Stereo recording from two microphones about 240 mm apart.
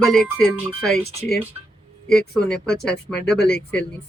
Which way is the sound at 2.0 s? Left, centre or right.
Centre.